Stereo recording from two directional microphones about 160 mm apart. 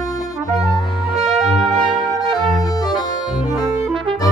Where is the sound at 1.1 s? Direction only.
Centre (ahead or behind).